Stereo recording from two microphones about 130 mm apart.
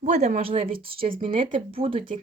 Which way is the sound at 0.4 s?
45° right (ahead or behind).